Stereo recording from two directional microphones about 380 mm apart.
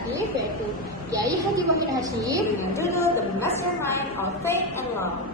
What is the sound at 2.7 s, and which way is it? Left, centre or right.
Speech, centre.